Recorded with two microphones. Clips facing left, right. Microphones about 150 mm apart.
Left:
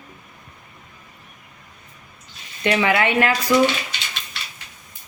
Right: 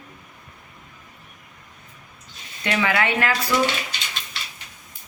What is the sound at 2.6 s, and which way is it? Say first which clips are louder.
Speech: left 4 dB; 20° left (ahead or behind).